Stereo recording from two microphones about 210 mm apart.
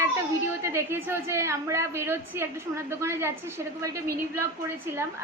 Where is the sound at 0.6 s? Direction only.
10° right (ahead or behind).